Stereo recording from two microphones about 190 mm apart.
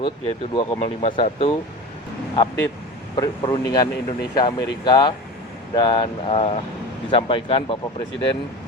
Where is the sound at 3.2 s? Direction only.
20° left (ahead or behind).